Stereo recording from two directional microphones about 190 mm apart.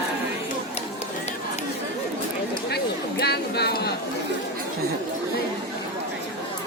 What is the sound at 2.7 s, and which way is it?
Chatter, 60° left (ahead or behind).